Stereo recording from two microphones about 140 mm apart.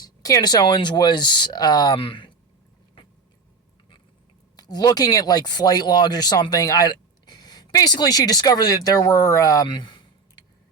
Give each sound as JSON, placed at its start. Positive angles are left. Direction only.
{"t": 0.0, "sound": "speech", "side_deg": 25}
{"t": 4.5, "sound": "speech", "side_deg": 30}